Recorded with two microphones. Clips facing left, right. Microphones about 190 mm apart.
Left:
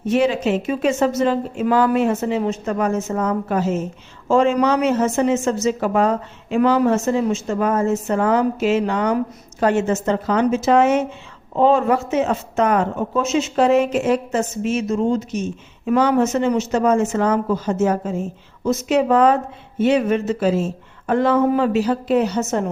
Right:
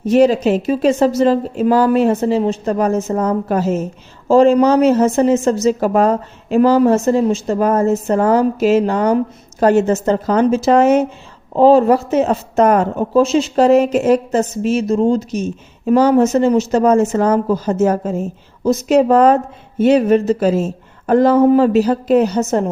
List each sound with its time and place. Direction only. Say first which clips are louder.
0.0 s speech: right 6 dB; 40° right (ahead or behind)